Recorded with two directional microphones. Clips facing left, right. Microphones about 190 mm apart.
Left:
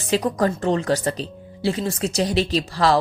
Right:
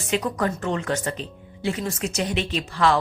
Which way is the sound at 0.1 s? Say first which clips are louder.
Left 4 dB; 35° left (ahead or behind).